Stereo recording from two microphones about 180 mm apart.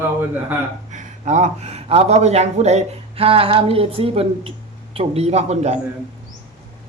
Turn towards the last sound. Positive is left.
turn(degrees=-35)  # may be behind; listen again after turning